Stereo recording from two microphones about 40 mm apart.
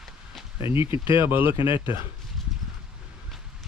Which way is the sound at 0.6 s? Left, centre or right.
Right.